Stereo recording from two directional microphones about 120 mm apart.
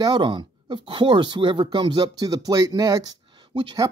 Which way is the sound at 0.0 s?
40° right (ahead or behind).